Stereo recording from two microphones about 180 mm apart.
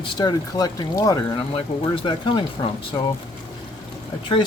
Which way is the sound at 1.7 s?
30° left (ahead or behind).